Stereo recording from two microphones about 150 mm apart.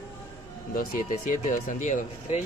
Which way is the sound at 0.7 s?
65° left (ahead or behind).